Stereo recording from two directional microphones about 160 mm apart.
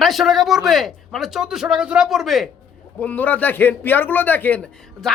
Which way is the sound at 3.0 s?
10° left (ahead or behind).